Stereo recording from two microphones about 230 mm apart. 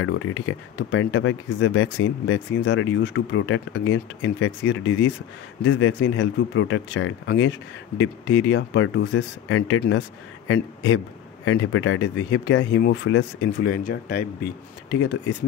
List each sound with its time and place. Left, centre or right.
0.0 s speech: left
13.7 s speech: left